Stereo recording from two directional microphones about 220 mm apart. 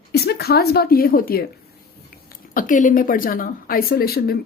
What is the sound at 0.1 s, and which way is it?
Speech, 45° left (ahead or behind).